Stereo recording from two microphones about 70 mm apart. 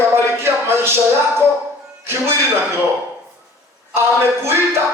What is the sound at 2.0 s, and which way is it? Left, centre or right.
Speech, right.